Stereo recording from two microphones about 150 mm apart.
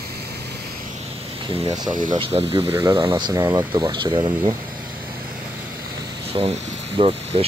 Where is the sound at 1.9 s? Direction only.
60° right (ahead or behind).